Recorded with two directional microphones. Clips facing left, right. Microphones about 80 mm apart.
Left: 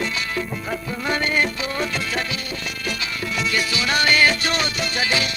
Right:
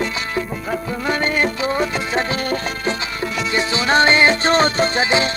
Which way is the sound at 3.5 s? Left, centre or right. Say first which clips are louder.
Right 7 dB; right.